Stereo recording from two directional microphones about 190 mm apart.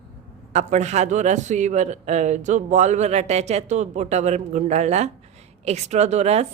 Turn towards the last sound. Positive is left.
turn(degrees=-35)  # may be behind; listen again after turning